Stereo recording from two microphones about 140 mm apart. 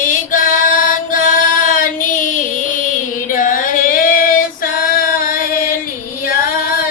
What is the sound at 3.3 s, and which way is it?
Female singing, 70° left (ahead or behind).